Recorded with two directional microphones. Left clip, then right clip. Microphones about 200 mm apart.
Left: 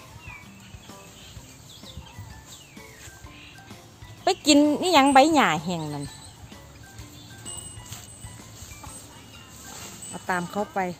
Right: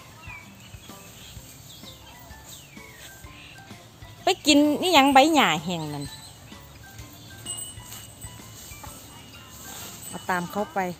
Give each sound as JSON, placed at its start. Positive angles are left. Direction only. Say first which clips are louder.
{"t": 4.2, "sound": "a woman's voice", "louder": "even", "side_deg": 10}
{"t": 10.1, "sound": "speech", "louder": "even", "side_deg": 5}